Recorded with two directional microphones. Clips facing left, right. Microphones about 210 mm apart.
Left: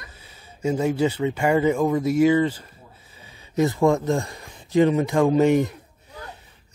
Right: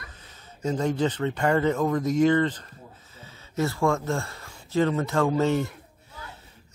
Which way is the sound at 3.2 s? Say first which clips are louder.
Left 6 dB; 15° left (ahead or behind).